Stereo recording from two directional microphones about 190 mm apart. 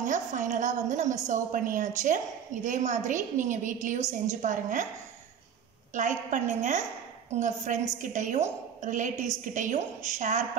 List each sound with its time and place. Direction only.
0.0 s a woman's voice: 40° right (ahead or behind)
5.9 s a woman's voice: 40° right (ahead or behind)